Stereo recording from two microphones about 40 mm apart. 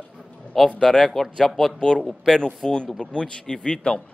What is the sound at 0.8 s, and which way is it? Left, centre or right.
Speech, centre.